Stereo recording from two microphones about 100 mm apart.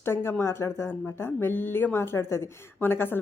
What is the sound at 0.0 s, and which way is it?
A woman's voice, 25° left (ahead or behind).